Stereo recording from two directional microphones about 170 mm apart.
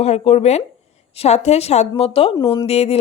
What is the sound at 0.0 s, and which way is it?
Speech, 40° left (ahead or behind).